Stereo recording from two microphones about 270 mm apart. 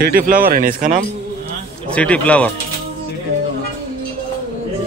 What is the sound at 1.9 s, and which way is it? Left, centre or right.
Speech, centre.